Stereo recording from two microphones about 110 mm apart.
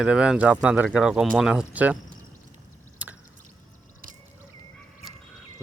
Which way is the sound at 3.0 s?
15° right (ahead or behind).